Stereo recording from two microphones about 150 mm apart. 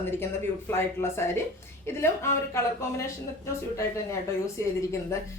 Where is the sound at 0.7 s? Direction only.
15° left (ahead or behind).